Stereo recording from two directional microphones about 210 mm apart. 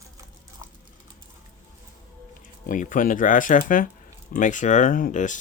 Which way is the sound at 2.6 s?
40° left (ahead or behind).